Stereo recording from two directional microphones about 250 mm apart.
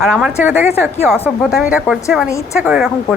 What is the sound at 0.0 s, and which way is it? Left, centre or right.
Speech, centre.